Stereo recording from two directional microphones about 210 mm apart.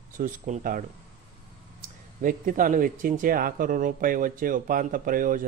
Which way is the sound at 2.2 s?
40° right (ahead or behind).